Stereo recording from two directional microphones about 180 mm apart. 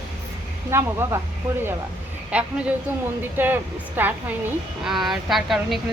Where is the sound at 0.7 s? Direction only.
15° right (ahead or behind).